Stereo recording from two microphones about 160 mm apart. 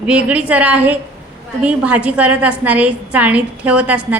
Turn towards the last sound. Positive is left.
turn(degrees=-10)  # may be behind; listen again after turning